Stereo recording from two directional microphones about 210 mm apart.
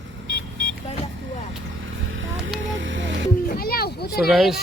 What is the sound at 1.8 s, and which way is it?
Vehicle, 65° right (ahead or behind).